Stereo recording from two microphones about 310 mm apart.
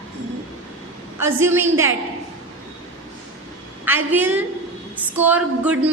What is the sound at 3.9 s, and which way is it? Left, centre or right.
A woman's voice, centre.